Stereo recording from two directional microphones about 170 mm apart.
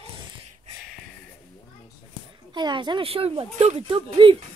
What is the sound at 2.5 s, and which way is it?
Speech, 25° right (ahead or behind).